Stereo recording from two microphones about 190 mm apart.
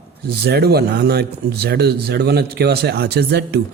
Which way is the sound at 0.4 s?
55° right (ahead or behind).